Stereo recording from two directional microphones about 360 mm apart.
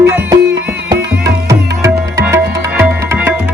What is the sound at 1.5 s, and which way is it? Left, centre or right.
Music, centre.